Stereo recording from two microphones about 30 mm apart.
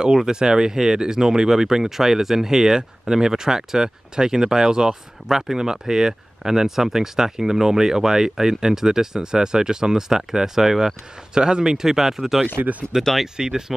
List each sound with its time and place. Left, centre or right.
0.0 s speech: right
11.3 s speech: right
12.9 s speech: right